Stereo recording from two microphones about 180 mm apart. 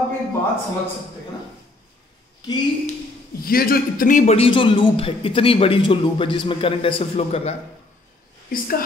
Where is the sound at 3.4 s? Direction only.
55° left (ahead or behind); by 7.6 s 35° left (ahead or behind).